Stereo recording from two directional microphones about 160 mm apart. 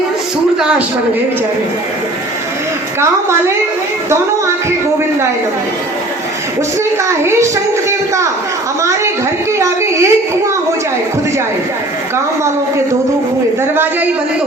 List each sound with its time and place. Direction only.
7.1 s a child's voice: 15° right (ahead or behind)
9.5 s speech: 15° right (ahead or behind)